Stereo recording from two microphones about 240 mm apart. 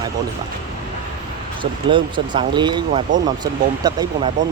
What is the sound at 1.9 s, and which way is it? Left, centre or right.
Speech, centre.